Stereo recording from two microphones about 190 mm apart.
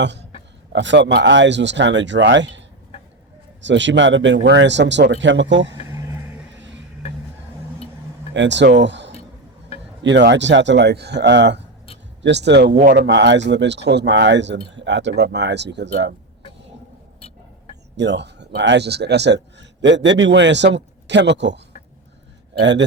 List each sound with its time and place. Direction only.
0.0 s a man's voice: 65° right (ahead or behind)
5.9 s a sound: 15° right (ahead or behind)
6.5 s vehicle: 75° right (ahead or behind)
8.3 s speech: 70° right (ahead or behind)
12.8 s a man's voice: 45° right (ahead or behind)
13.1 s speech: 70° right (ahead or behind)
17.2 s a sound: 35° left (ahead or behind)
17.9 s speech: 65° right (ahead or behind)